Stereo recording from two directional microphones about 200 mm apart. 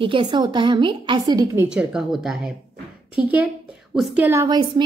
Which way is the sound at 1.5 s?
5° right (ahead or behind).